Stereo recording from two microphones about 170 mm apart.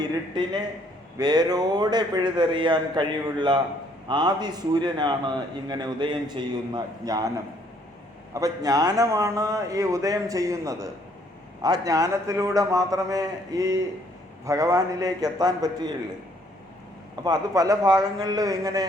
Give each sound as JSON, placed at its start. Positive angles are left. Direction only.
{"t": 0.0, "sound": "a man's voice", "side_deg": -25}
{"t": 17.2, "sound": "a man's voice", "side_deg": -20}